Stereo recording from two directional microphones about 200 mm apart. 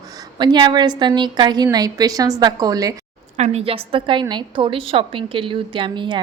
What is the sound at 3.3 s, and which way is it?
Speech, 35° right (ahead or behind).